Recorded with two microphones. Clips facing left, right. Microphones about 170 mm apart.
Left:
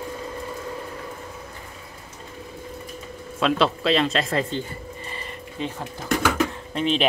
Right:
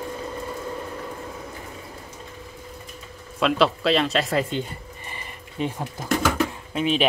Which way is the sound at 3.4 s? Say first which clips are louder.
Right 1 dB; centre (ahead or behind).